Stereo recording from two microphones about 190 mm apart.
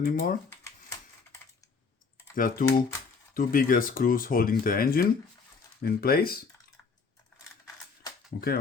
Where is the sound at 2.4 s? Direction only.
45° left (ahead or behind).